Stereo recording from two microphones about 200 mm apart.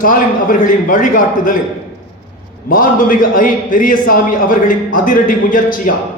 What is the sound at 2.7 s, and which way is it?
A man's voice, 45° left (ahead or behind).